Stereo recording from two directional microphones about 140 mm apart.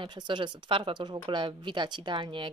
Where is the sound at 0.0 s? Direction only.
35° right (ahead or behind).